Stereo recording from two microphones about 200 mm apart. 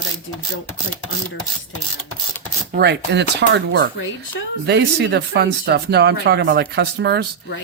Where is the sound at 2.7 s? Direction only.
55° right (ahead or behind).